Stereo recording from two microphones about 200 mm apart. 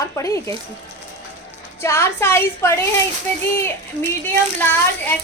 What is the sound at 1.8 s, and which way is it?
Speech, 15° left (ahead or behind).